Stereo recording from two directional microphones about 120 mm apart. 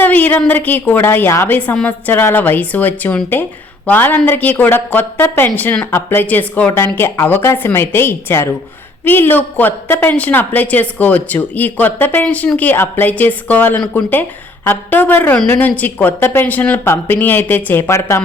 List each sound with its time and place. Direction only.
0.0 s a woman's voice: 15° left (ahead or behind)